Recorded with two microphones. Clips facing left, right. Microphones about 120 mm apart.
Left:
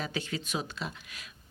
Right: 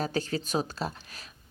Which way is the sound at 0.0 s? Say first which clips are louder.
Right 5 dB; 40° right (ahead or behind).